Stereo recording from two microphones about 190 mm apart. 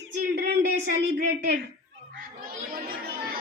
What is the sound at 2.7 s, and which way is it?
Chatter, 50° right (ahead or behind).